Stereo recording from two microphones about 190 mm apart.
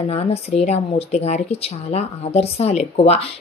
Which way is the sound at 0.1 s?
35° left (ahead or behind).